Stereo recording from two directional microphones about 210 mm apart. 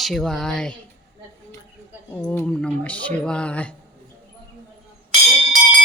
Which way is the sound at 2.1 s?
5° left (ahead or behind).